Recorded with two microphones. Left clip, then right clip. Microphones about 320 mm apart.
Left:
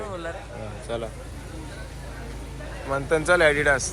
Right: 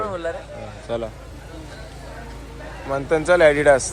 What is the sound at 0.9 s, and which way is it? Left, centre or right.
Speech, centre.